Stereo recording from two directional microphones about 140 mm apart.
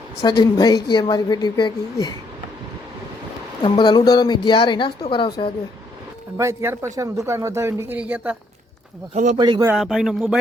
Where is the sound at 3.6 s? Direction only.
35° left (ahead or behind).